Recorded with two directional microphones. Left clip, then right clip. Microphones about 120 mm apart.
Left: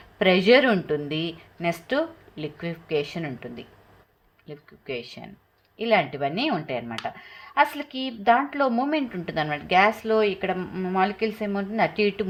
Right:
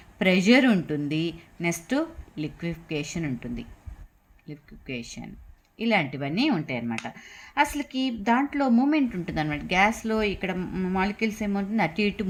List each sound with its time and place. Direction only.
0.2 s speech: 35° right (ahead or behind)